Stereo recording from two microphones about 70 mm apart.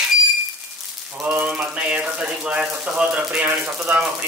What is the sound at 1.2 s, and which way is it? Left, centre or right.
Speech, right.